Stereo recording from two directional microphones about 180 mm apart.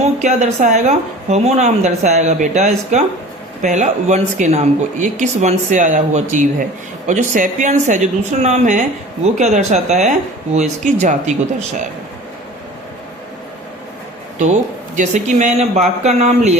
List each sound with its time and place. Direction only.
0.0 s speech: 40° right (ahead or behind)
14.3 s speech: 40° right (ahead or behind)